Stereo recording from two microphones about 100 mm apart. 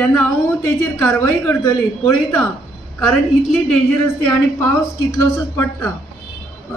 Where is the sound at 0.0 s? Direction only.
15° left (ahead or behind).